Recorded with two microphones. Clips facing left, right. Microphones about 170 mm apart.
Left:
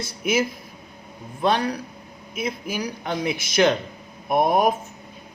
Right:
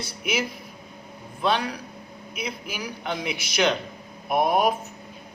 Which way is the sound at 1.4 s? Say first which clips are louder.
Left 3 dB; 45° left (ahead or behind).